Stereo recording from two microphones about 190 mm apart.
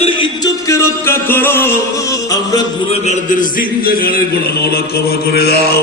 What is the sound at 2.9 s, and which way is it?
A man's voice, 40° left (ahead or behind).